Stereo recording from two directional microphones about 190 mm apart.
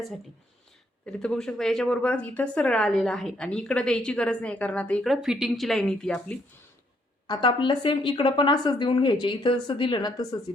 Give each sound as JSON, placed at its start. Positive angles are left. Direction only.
{"t": 1.0, "sound": "a woman's voice", "side_deg": 5}
{"t": 7.3, "sound": "a woman's voice", "side_deg": 25}